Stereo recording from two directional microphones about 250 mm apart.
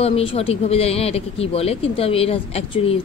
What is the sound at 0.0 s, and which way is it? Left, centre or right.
Speech, left.